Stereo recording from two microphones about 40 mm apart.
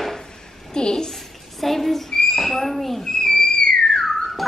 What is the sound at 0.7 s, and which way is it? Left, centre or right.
Speech, centre.